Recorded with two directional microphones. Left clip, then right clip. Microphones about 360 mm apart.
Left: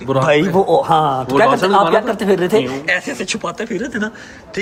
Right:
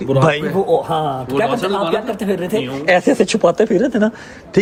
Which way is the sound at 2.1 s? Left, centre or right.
Centre.